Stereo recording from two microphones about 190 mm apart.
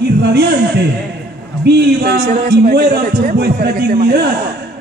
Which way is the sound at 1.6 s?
60° right (ahead or behind).